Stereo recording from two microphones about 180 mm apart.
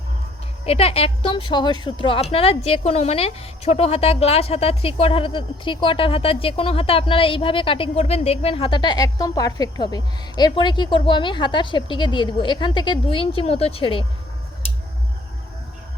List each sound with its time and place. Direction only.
0.6 s a woman's voice: 35° left (ahead or behind)